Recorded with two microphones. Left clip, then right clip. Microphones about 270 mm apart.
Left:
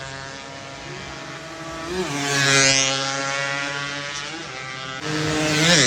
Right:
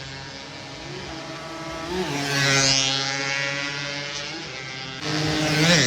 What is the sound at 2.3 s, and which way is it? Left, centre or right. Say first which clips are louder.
Music: left 3 dB; left.